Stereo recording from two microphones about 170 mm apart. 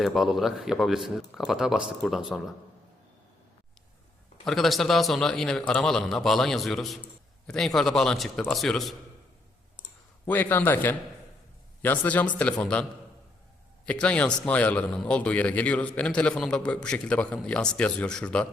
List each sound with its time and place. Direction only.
0.0 s a man's voice: centre (ahead or behind)
4.4 s a man's voice: centre (ahead or behind)
10.2 s a man's voice: 10° left (ahead or behind)
13.8 s a man's voice: 5° left (ahead or behind)